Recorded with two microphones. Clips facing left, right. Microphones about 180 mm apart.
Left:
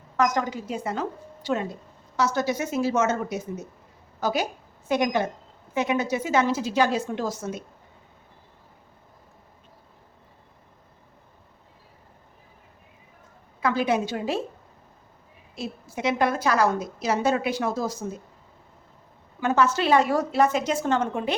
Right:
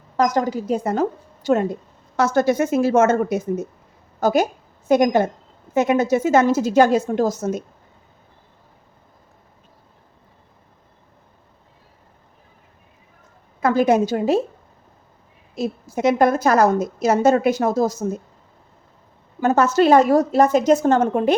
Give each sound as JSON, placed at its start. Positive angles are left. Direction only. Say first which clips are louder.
{"t": 0.2, "sound": "a woman's voice", "louder": "right 5 dB", "side_deg": -35}
{"t": 13.6, "sound": "a woman's voice", "louder": "right 7 dB", "side_deg": -45}
{"t": 15.5, "sound": "a woman's voice", "louder": "right 9 dB", "side_deg": -40}
{"t": 19.4, "sound": "a woman's voice", "louder": "right 6 dB", "side_deg": -40}